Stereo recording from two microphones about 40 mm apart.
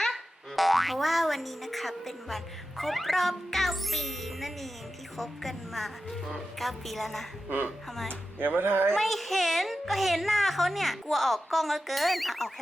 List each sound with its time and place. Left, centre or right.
0.1 s a woman's voice: centre
8.4 s speech: right
9.0 s a woman's voice: centre